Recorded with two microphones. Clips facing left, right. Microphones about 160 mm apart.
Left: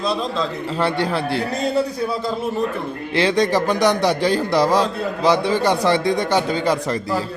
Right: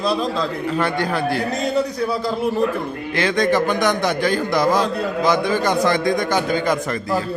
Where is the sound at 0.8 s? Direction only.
30° left (ahead or behind).